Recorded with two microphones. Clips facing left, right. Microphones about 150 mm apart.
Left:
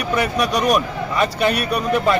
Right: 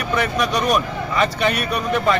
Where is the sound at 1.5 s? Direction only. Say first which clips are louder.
Left 2 dB; 35° left (ahead or behind).